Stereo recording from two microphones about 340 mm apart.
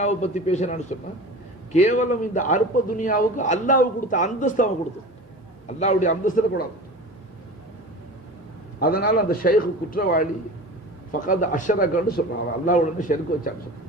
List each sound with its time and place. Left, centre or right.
0.0 s a man's voice: centre
8.8 s a man's voice: left